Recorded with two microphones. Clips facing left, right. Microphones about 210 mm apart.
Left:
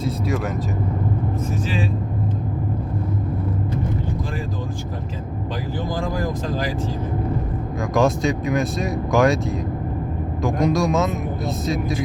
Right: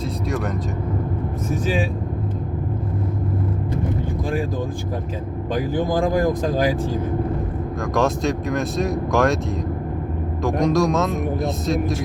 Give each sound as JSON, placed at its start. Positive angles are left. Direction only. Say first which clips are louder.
{"t": 5.9, "sound": "speech", "louder": "right 6 dB", "side_deg": -55}
{"t": 7.9, "sound": "speech", "louder": "left 2 dB", "side_deg": 0}
{"t": 10.4, "sound": "speech", "louder": "right 1 dB", "side_deg": 0}